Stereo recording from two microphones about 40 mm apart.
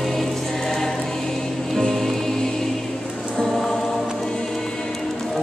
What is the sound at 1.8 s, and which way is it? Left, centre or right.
Music, centre.